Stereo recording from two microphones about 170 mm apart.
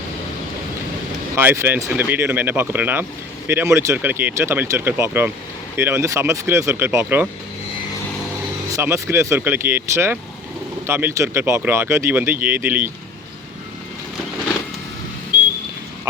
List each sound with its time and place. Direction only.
1.4 s speech: 10° right (ahead or behind)
8.7 s speech: 15° right (ahead or behind)